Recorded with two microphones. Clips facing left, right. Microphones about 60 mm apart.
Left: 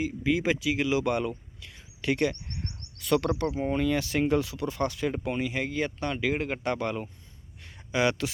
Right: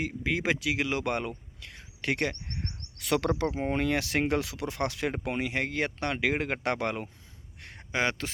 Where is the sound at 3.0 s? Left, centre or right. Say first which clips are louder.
Left 3 dB; right.